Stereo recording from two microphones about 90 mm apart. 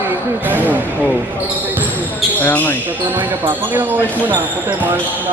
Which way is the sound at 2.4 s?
20° left (ahead or behind).